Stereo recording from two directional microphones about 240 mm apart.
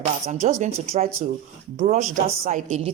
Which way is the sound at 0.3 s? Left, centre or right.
Right.